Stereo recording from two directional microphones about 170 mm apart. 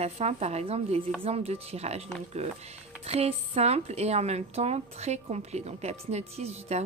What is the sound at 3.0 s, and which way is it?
A woman's voice, 35° right (ahead or behind).